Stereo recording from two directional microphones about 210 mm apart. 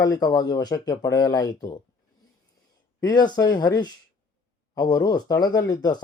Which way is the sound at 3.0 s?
20° left (ahead or behind).